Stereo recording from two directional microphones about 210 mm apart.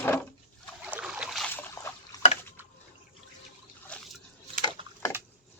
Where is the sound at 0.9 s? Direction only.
5° right (ahead or behind); by 1.9 s 10° left (ahead or behind).